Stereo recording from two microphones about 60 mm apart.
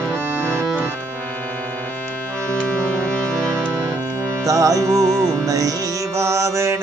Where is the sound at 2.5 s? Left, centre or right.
Centre.